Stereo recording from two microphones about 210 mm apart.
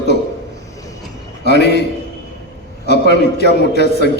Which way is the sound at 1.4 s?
55° left (ahead or behind).